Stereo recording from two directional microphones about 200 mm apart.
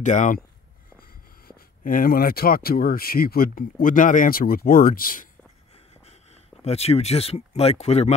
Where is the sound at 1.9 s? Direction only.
45° left (ahead or behind).